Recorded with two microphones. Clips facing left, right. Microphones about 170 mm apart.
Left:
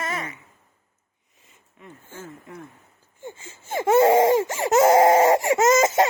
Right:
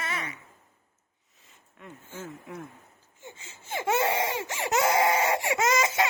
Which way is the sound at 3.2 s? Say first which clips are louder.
Left 8 dB; 50° left (ahead or behind).